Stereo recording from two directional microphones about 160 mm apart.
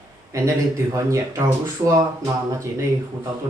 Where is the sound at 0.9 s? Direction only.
20° right (ahead or behind).